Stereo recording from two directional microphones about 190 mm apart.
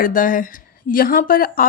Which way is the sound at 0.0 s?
45° left (ahead or behind).